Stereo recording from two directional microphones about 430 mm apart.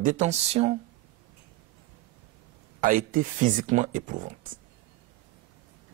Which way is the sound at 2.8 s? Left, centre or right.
Centre.